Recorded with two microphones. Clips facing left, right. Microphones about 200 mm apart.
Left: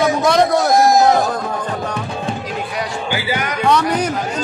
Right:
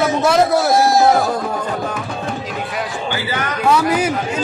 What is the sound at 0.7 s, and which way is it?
Speech, 15° left (ahead or behind).